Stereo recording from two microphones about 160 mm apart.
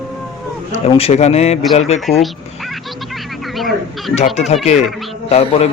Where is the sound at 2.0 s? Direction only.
Centre (ahead or behind).